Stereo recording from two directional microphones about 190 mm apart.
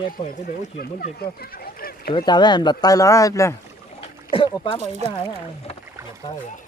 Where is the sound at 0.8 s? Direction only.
55° left (ahead or behind).